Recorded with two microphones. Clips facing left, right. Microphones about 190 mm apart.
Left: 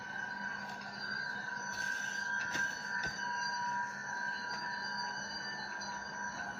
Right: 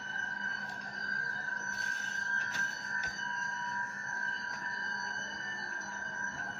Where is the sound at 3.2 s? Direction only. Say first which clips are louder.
Left 3 dB; 10° left (ahead or behind).